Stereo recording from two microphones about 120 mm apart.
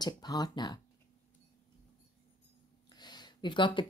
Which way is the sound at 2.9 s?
35° left (ahead or behind).